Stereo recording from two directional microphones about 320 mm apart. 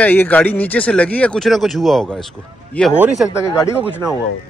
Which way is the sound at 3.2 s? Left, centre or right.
Centre.